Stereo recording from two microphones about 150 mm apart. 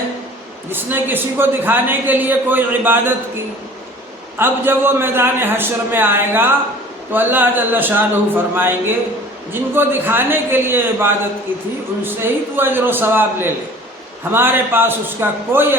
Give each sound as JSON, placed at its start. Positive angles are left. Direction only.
{"t": 0.7, "sound": "a man's voice", "side_deg": -15}
{"t": 4.4, "sound": "a man's voice", "side_deg": -15}